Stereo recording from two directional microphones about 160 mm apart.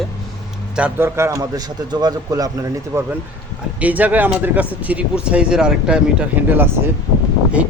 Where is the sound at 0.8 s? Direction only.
15° right (ahead or behind).